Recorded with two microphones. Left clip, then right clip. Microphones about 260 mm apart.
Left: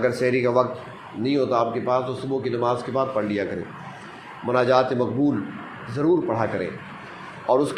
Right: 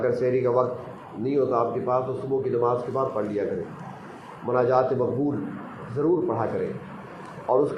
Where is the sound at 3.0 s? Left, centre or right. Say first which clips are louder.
Left 2 dB; left.